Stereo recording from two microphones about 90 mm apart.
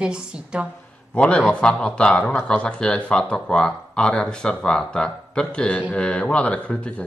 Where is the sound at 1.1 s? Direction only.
15° left (ahead or behind).